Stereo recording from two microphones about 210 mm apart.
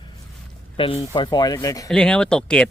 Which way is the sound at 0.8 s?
25° left (ahead or behind).